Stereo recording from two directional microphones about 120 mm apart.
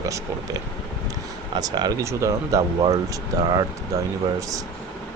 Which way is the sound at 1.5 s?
35° right (ahead or behind).